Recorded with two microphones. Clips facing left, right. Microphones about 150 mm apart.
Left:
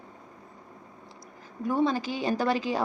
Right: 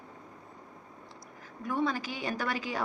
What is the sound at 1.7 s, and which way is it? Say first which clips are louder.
A woman's voice: left 5 dB; 25° left (ahead or behind).